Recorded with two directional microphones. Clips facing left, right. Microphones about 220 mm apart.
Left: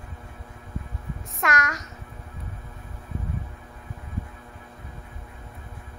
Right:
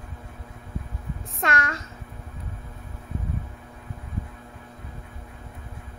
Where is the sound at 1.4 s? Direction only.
30° right (ahead or behind).